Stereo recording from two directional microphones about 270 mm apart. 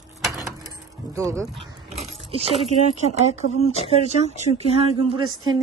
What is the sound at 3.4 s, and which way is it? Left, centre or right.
Speech, left.